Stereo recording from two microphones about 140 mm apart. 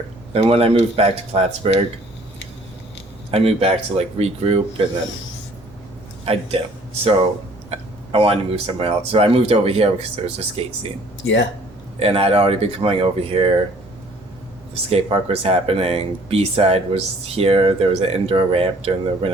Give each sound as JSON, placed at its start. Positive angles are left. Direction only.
{"t": 0.3, "sound": "speech", "side_deg": -45}
{"t": 3.3, "sound": "speech", "side_deg": -45}
{"t": 6.2, "sound": "speech", "side_deg": -45}
{"t": 7.7, "sound": "speech", "side_deg": -45}
{"t": 11.9, "sound": "speech", "side_deg": -45}
{"t": 14.8, "sound": "speech", "side_deg": -45}